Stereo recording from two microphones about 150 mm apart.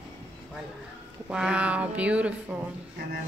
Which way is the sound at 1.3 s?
5° right (ahead or behind).